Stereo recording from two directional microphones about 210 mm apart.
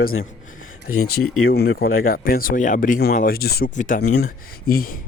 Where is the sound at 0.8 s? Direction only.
85° left.